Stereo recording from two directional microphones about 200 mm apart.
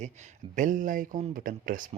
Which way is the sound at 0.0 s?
35° right (ahead or behind).